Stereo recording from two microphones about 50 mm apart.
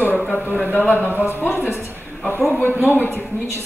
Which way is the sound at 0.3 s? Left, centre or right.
Left.